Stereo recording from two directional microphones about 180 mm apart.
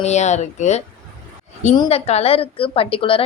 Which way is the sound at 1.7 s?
30° left (ahead or behind).